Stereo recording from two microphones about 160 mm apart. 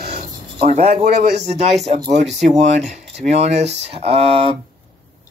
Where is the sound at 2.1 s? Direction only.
45° right (ahead or behind).